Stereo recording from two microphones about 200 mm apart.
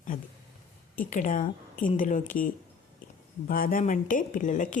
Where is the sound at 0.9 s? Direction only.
40° left (ahead or behind).